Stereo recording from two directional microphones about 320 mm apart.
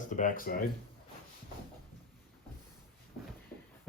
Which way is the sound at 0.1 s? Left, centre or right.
Left.